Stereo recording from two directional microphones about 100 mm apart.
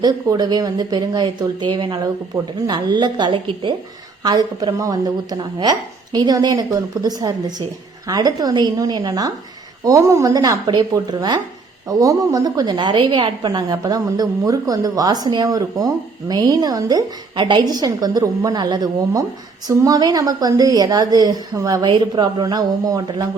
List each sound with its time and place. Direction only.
0.0 s speech: 45° right (ahead or behind)
4.2 s a woman's voice: 45° right (ahead or behind)
17.3 s a woman's voice: 50° right (ahead or behind)